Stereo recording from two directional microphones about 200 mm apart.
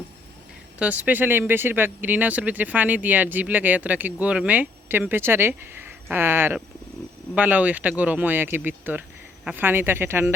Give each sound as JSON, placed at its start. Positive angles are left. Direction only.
{"t": 0.8, "sound": "speech", "side_deg": -5}